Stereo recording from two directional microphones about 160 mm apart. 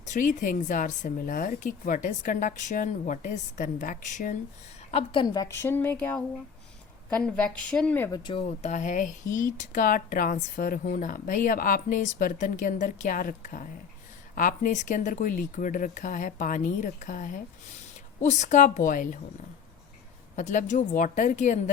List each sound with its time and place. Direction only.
0.0 s speech: 50° left (ahead or behind)
4.9 s a woman's voice: 40° left (ahead or behind)
5.2 s a woman's voice: 25° left (ahead or behind)
8.3 s speech: 40° left (ahead or behind); by 19.2 s 55° left (ahead or behind)
20.3 s speech: 50° left (ahead or behind)